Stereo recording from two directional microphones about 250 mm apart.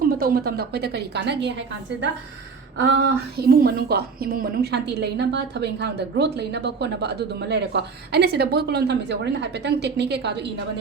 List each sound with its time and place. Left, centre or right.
0.1 s a woman's voice: right